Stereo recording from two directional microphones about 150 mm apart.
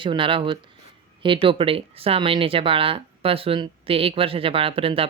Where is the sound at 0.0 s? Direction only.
35° right (ahead or behind).